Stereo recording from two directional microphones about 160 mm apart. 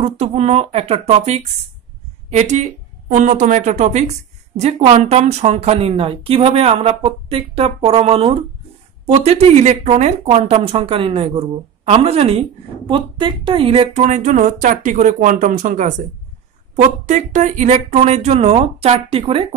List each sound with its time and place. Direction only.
0.0 s speech: 40° right (ahead or behind)